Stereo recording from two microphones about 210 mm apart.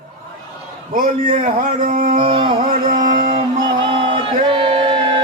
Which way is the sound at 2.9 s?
40° right (ahead or behind).